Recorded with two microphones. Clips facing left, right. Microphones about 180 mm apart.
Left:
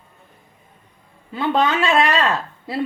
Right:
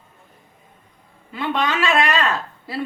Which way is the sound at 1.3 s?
30° left (ahead or behind).